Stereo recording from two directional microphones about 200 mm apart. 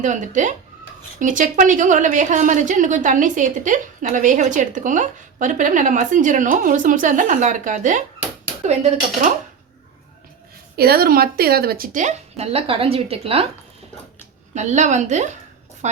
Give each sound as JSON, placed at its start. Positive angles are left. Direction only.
{"t": 0.0, "sound": "a woman's voice", "side_deg": -40}
{"t": 10.8, "sound": "a woman's voice", "side_deg": -50}
{"t": 14.5, "sound": "a woman's voice", "side_deg": -35}